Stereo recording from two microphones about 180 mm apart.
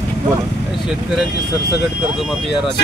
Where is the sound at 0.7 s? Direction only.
Centre (ahead or behind).